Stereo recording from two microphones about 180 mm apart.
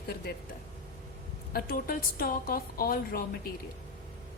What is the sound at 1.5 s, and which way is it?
A woman's voice, 55° left (ahead or behind).